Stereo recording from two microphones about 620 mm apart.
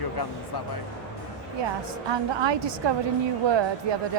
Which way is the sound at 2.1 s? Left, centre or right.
Right.